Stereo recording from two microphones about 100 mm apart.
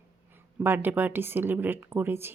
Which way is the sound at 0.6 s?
20° right (ahead or behind).